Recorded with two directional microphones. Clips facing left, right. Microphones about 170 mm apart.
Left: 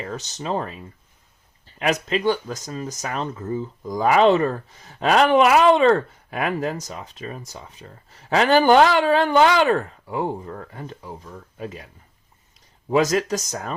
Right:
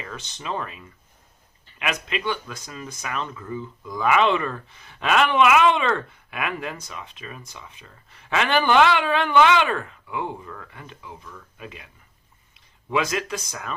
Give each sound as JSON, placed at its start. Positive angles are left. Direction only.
{"t": 0.0, "sound": "speech", "side_deg": 40}